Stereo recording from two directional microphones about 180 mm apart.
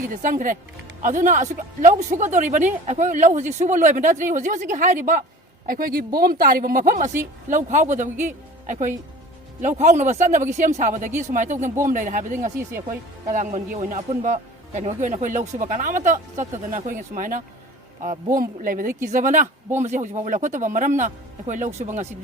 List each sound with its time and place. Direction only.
0.1 s speech: 45° right (ahead or behind)